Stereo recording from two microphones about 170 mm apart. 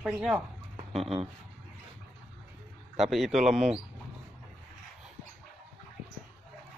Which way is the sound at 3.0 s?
Centre (ahead or behind).